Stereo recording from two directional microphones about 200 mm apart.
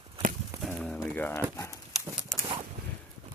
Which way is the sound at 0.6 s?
Centre (ahead or behind).